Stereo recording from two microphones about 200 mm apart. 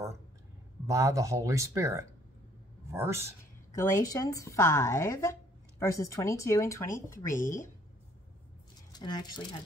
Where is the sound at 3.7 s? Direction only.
15° left (ahead or behind).